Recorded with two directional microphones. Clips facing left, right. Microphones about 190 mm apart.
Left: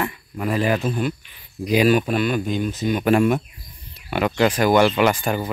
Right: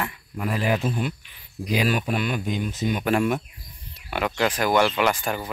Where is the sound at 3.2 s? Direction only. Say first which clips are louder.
Left 5 dB; 45° left (ahead or behind).